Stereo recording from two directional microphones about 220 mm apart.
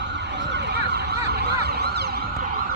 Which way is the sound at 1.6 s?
50° right (ahead or behind).